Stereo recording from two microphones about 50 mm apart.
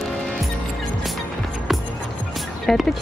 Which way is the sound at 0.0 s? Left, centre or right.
Centre.